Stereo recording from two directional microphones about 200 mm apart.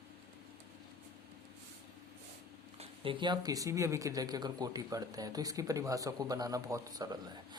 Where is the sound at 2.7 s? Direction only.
25° right (ahead or behind).